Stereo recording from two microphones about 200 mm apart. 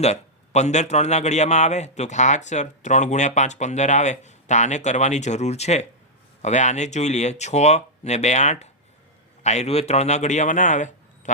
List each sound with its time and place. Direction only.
0.0 s speech: 35° left (ahead or behind)